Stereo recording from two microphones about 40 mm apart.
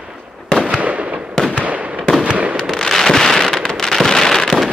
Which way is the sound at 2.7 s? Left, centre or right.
Centre.